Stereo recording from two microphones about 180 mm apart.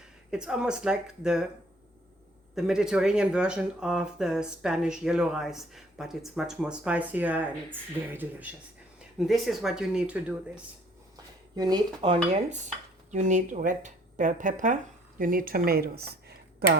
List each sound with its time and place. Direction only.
0.3 s speech: 5° right (ahead or behind)
2.6 s speech: 5° right (ahead or behind)
9.1 s speech: centre (ahead or behind)
11.5 s speech: 25° right (ahead or behind); by 16.6 s 60° right (ahead or behind)